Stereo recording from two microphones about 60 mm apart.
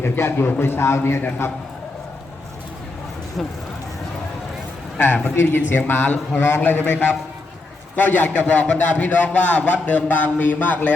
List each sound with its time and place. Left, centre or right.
0.0 s a man's voice: left
4.9 s a man's voice: left